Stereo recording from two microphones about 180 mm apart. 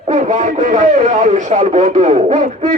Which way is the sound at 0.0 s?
40° right (ahead or behind).